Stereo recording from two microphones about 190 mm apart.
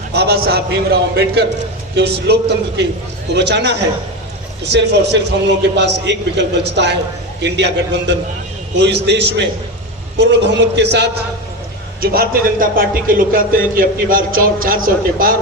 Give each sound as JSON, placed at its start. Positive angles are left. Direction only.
{"t": 0.1, "sound": "a man's voice", "side_deg": -60}
{"t": 11.9, "sound": "speech", "side_deg": -50}